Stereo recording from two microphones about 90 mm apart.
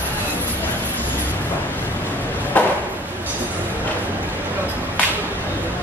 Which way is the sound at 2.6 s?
15° left (ahead or behind).